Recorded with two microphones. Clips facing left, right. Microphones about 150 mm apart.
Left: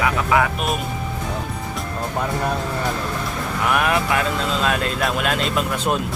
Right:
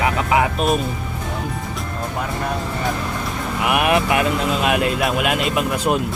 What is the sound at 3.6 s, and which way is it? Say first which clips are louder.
Speech: right 2 dB; 15° right (ahead or behind).